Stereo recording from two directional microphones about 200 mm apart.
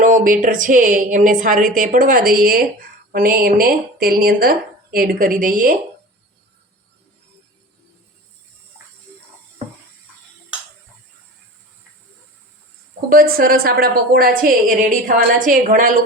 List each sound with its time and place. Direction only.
0.0 s a woman's voice: 40° right (ahead or behind)
13.1 s a woman's voice: 45° right (ahead or behind)